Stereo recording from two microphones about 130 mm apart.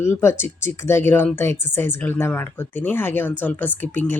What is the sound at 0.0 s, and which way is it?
Speech, 20° left (ahead or behind).